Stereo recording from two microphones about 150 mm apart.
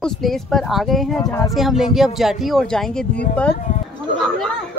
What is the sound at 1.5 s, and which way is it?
Speech, centre (ahead or behind).